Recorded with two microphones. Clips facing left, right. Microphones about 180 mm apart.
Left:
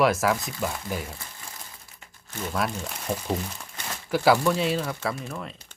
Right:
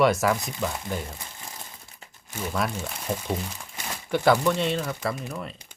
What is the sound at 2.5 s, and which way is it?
Speech, centre (ahead or behind).